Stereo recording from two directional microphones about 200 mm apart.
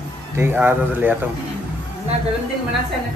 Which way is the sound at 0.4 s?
10° right (ahead or behind).